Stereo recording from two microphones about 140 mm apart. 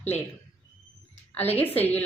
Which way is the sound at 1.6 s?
15° left (ahead or behind).